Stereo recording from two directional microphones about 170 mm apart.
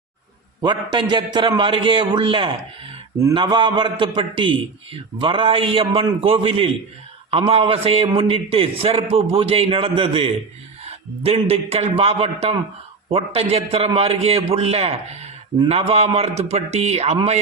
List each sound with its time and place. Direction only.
0.6 s a man's voice: 25° right (ahead or behind)